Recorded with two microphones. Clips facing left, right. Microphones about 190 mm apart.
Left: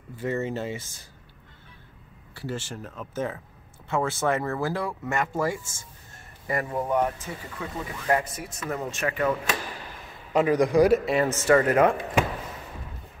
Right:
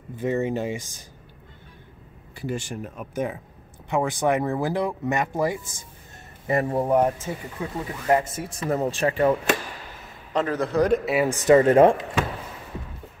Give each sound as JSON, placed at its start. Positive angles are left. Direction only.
{"t": 0.2, "sound": "speech", "side_deg": -15}
{"t": 2.3, "sound": "speech", "side_deg": -15}
{"t": 6.4, "sound": "speech", "side_deg": -30}
{"t": 10.3, "sound": "a man's voice", "side_deg": 10}
{"t": 11.1, "sound": "speech", "side_deg": -10}